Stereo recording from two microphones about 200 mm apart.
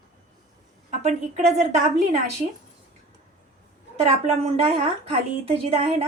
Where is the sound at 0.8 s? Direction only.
35° right (ahead or behind).